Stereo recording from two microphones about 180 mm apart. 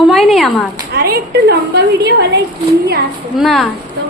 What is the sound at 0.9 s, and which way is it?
A woman's voice, 60° right (ahead or behind).